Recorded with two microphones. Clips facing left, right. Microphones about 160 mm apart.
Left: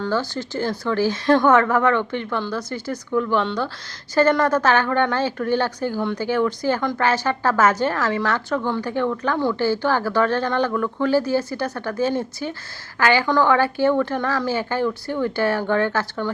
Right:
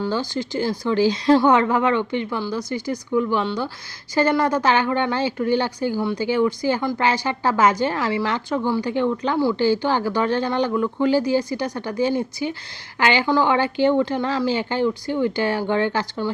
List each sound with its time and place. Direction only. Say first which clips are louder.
0.0 s speech: even; 15° right (ahead or behind)